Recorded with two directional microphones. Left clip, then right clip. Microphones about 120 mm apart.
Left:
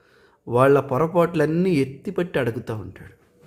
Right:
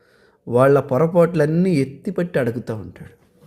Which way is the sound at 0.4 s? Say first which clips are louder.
Right 2 dB; 15° right (ahead or behind).